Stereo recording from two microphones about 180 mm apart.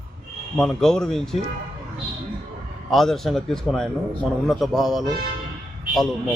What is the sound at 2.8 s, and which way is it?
A man's voice, centre (ahead or behind).